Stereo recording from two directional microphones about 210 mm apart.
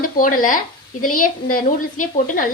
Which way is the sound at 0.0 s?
40° left (ahead or behind).